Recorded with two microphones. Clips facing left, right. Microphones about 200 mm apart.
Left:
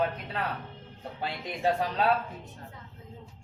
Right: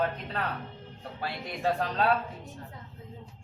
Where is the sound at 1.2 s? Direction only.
15° left (ahead or behind).